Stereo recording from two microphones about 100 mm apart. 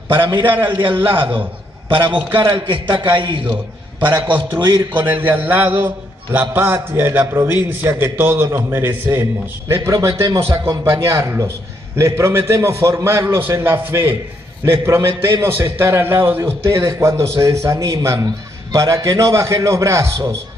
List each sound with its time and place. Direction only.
0.1 s a man's voice: 50° right (ahead or behind)
4.9 s a man's voice: 20° right (ahead or behind)
9.8 s a man's voice: 40° right (ahead or behind)